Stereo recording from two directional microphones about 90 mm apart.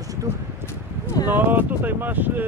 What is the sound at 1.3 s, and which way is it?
Speech, 20° right (ahead or behind).